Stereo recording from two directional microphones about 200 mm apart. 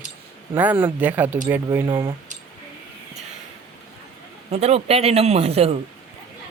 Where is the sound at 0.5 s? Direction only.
10° right (ahead or behind).